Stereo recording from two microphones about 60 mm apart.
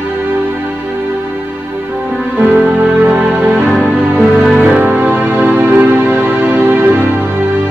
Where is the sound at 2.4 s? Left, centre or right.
Right.